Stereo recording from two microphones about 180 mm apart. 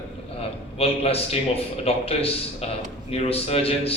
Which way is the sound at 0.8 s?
35° left (ahead or behind).